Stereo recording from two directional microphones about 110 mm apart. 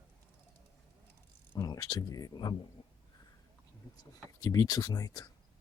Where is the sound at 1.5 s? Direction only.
35° left (ahead or behind).